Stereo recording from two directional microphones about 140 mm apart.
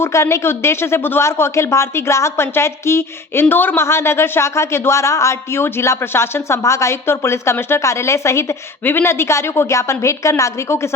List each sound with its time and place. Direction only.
0.0 s a man's voice: 20° left (ahead or behind)